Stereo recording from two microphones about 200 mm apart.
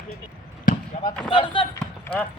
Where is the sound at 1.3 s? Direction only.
25° left (ahead or behind).